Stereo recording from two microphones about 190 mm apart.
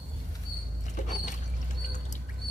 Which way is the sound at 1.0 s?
40° left (ahead or behind).